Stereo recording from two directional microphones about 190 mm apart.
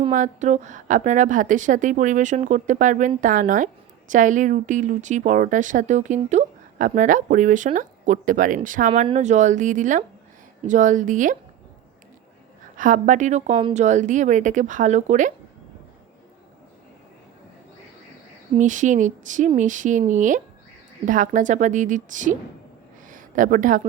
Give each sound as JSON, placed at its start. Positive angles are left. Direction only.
{"t": 0.1, "sound": "a woman's voice", "side_deg": -40}
{"t": 12.7, "sound": "a woman's voice", "side_deg": -45}
{"t": 18.5, "sound": "a woman's voice", "side_deg": -40}
{"t": 23.0, "sound": "a sound", "side_deg": -45}